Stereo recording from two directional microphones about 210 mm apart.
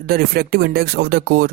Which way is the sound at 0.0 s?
45° right (ahead or behind).